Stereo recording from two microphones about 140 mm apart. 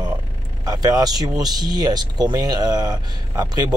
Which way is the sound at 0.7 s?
25° right (ahead or behind).